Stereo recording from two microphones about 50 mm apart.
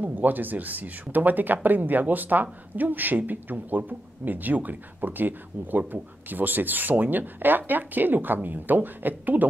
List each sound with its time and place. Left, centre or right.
0.0 s speech: right